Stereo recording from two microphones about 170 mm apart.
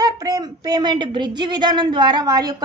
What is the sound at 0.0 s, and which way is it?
A woman's voice, 20° right (ahead or behind).